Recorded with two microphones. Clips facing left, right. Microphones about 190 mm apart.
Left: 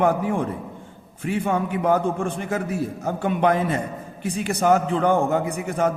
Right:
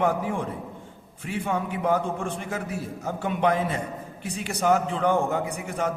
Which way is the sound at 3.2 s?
55° left (ahead or behind).